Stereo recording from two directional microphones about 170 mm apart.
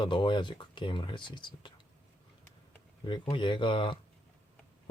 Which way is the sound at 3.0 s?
30° left (ahead or behind).